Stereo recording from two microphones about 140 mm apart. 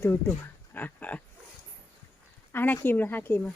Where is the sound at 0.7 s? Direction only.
10° left (ahead or behind).